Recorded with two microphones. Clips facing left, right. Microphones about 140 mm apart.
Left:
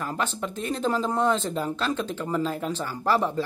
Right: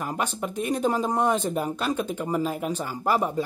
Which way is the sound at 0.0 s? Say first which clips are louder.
Even; 15° right (ahead or behind).